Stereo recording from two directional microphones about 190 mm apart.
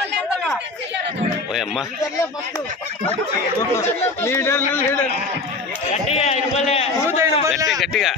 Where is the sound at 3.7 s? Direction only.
15° left (ahead or behind).